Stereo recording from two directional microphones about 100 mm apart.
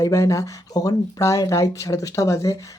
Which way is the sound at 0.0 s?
30° left (ahead or behind).